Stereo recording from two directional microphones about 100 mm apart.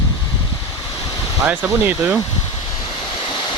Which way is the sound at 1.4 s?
15° right (ahead or behind).